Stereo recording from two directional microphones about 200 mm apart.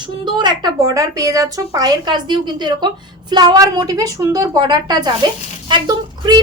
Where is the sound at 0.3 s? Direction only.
20° right (ahead or behind).